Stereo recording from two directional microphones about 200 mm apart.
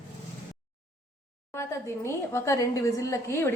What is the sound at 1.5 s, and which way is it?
A woman's voice, 15° left (ahead or behind).